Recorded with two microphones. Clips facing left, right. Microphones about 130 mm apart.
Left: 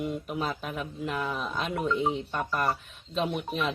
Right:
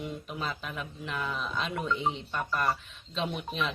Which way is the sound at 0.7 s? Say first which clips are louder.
Left 5 dB; 45° left (ahead or behind).